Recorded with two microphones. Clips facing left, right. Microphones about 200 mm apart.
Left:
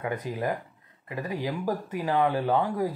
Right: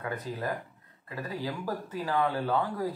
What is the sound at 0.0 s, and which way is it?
Speech, 20° left (ahead or behind).